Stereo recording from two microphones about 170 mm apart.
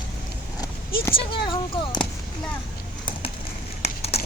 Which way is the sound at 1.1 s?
30° left (ahead or behind).